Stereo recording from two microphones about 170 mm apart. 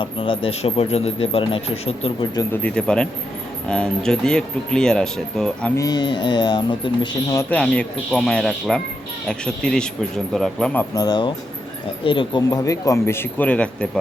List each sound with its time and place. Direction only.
0.0 s speech: 30° left (ahead or behind)
2.3 s speech: 20° left (ahead or behind)
2.6 s speech: 5° left (ahead or behind)
5.7 s speech: 20° left (ahead or behind)
7.5 s speech: 5° left (ahead or behind)
10.9 s speech: 25° left (ahead or behind); by 14.0 s 5° left (ahead or behind)